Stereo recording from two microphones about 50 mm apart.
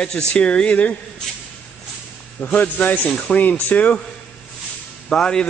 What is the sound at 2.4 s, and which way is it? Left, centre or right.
Speech, left.